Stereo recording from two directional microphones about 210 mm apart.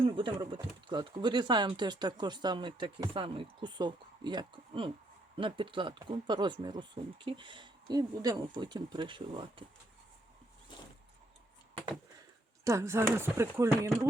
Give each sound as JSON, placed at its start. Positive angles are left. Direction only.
{"t": 0.0, "sound": "speech", "side_deg": -25}
{"t": 12.6, "sound": "speech", "side_deg": -15}